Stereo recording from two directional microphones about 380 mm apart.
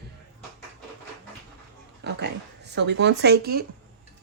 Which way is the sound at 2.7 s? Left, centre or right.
Right.